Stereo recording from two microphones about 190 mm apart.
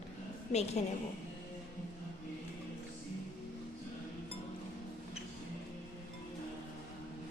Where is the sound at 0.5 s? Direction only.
35° left (ahead or behind).